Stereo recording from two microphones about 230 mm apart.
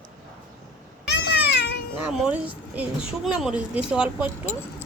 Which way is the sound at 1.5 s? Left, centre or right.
Left.